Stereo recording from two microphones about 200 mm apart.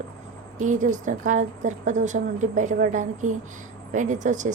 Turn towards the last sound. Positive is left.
turn(degrees=-40)  # may be behind; listen again after turning